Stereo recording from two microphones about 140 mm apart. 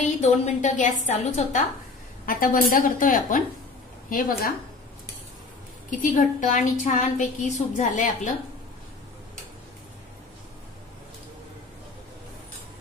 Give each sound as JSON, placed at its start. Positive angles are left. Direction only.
{"t": 0.0, "sound": "a woman's voice", "side_deg": 60}
{"t": 2.2, "sound": "a woman's voice", "side_deg": 90}
{"t": 4.1, "sound": "a woman's voice", "side_deg": 90}
{"t": 5.9, "sound": "a woman's voice", "side_deg": 70}